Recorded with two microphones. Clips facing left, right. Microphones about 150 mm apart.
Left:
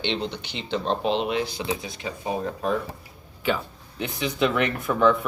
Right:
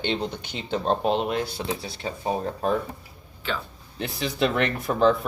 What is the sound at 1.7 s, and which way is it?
Speech, 35° right (ahead or behind).